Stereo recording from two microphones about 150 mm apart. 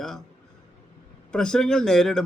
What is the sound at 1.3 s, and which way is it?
Speech, 5° left (ahead or behind).